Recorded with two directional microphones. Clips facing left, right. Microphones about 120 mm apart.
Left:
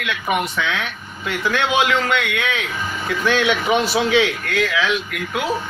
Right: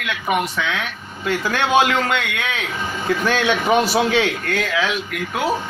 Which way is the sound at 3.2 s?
45° right (ahead or behind).